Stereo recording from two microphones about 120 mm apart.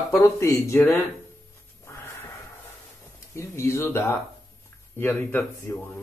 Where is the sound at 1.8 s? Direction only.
20° left (ahead or behind).